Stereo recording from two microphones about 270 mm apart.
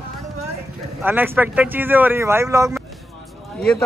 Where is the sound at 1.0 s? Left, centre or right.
Centre.